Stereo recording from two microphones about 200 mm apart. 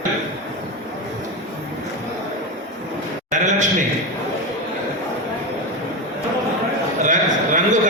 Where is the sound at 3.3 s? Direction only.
40° right (ahead or behind).